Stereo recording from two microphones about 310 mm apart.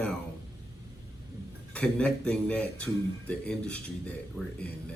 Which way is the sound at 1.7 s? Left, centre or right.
Centre.